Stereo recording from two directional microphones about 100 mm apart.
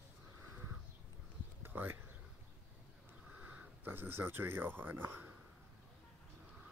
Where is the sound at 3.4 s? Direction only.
15° right (ahead or behind).